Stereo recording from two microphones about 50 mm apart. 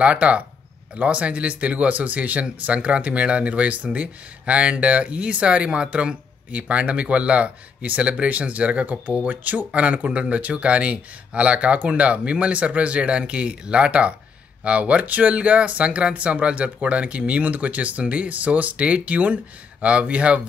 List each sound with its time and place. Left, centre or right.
0.0 s speech: right